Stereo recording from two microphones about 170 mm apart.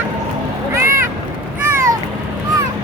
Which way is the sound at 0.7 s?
15° right (ahead or behind).